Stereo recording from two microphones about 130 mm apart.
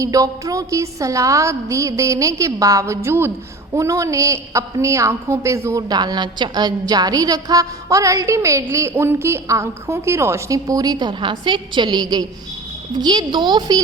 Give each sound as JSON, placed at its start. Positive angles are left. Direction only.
{"t": 0.0, "sound": "a woman's voice", "side_deg": -25}